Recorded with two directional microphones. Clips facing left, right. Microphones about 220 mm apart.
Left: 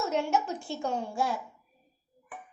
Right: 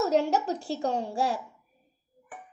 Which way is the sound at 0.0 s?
35° right (ahead or behind).